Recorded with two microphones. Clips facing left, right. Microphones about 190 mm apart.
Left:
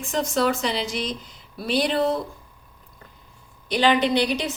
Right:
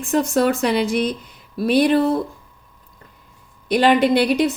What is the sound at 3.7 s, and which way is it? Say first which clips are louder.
Speech: right 5 dB; 60° right (ahead or behind).